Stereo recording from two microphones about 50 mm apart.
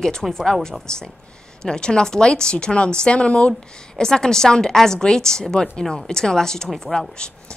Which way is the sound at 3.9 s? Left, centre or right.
Centre.